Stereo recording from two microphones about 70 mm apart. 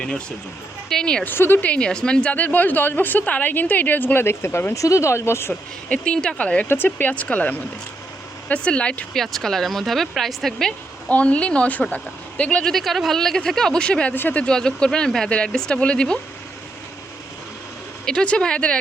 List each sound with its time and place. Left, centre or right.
0.0 s speech: centre
1.2 s speech: left
1.6 s a woman's voice: centre; by 5.5 s left
5.9 s a woman's voice: centre
9.1 s speech: centre
11.1 s speech: centre
14.2 s a woman's voice: left
14.4 s speech: centre
18.0 s speech: centre